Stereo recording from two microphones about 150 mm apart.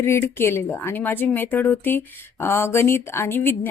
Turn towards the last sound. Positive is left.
turn(degrees=15)  # may be behind; listen again after turning